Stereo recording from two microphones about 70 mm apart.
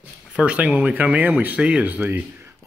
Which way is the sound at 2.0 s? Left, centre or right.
Right.